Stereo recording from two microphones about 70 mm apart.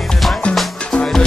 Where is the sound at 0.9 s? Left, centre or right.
Centre.